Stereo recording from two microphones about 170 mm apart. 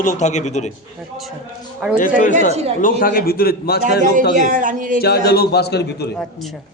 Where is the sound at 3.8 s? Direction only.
50° right (ahead or behind).